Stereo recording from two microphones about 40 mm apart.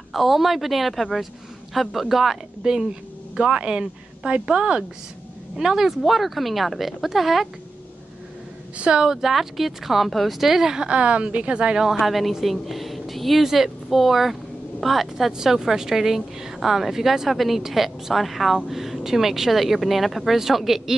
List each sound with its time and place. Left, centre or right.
0.1 s a woman's voice: centre
2.6 s a woman's voice: centre
5.6 s a woman's voice: centre
8.7 s a woman's voice: right
9.0 s speech: centre
10.9 s a woman's voice: right
12.0 s a woman's voice: centre